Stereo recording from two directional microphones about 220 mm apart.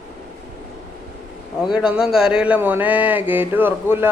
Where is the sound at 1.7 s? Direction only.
5° right (ahead or behind).